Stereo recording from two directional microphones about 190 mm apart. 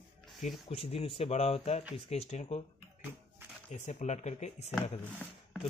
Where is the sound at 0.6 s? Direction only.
30° left (ahead or behind).